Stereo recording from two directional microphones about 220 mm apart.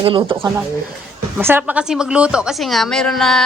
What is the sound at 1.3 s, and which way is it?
A woman's voice, 10° right (ahead or behind).